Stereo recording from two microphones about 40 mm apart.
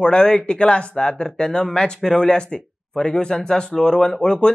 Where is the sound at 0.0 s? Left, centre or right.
Left.